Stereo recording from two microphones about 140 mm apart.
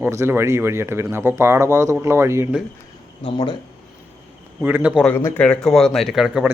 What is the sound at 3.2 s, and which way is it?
Speech, 35° left (ahead or behind).